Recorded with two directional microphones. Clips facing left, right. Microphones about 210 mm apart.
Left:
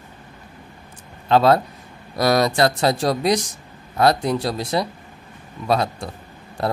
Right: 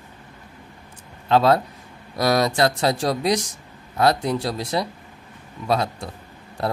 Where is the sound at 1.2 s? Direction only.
60° left (ahead or behind).